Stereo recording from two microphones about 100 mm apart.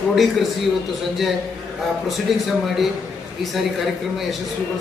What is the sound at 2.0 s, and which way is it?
A man's voice, centre (ahead or behind).